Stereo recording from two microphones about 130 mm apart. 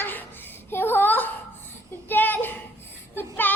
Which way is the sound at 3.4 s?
15° left (ahead or behind).